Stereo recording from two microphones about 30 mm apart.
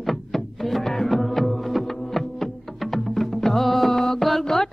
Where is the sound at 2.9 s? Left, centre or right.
Centre.